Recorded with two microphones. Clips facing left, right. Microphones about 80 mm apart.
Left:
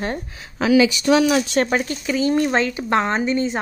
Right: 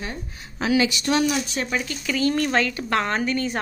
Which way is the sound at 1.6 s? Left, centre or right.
Left.